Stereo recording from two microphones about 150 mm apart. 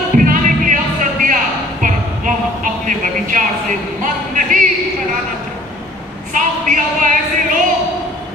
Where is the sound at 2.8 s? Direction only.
60° right (ahead or behind).